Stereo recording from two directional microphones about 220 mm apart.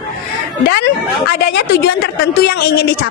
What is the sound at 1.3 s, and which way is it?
A woman's voice, 45° left (ahead or behind).